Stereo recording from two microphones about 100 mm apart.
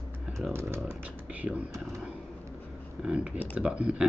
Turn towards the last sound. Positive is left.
turn(degrees=-10)  # may be behind; listen again after turning